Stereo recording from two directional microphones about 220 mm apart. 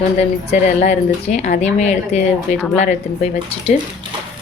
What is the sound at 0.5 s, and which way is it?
Speech, 30° left (ahead or behind).